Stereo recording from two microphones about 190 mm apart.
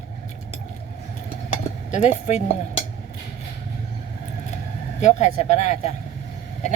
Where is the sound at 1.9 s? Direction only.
35° left (ahead or behind).